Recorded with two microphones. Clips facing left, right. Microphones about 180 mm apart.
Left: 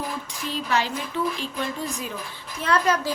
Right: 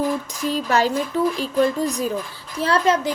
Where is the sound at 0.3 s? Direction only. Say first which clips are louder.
Right 4 dB; 45° right (ahead or behind).